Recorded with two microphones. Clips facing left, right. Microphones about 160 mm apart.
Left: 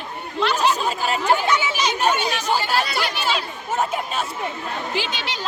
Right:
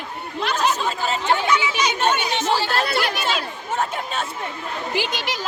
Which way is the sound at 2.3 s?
25° right (ahead or behind).